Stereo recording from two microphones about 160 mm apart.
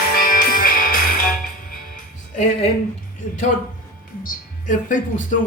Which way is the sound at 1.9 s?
50° left (ahead or behind).